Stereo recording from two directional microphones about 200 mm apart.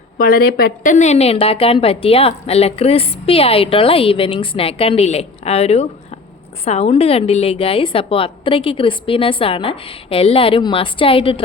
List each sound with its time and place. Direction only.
0.2 s a woman's voice: 50° left (ahead or behind); by 11.4 s 25° left (ahead or behind)